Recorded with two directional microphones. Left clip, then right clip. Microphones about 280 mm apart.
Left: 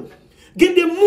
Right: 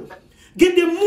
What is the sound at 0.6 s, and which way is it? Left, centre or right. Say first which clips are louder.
Speech: even; centre.